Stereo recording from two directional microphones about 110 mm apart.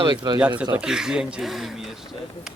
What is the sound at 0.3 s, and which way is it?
Speech, 10° right (ahead or behind).